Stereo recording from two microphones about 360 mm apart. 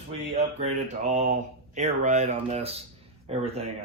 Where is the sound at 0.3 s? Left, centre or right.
Centre.